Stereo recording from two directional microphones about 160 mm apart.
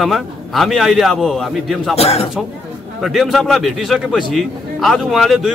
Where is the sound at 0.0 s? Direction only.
Centre (ahead or behind).